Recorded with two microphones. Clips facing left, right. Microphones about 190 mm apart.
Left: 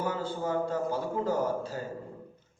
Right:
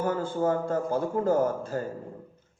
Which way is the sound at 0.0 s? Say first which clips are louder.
Right 5 dB; 50° right (ahead or behind).